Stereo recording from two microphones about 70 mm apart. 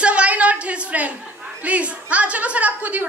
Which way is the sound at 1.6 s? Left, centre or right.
Centre.